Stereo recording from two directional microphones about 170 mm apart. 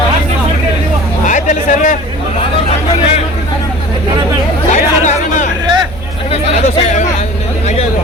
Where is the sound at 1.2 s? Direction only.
45° left (ahead or behind).